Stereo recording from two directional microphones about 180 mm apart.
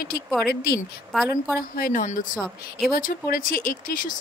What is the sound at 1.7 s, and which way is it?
Speech, 50° left (ahead or behind).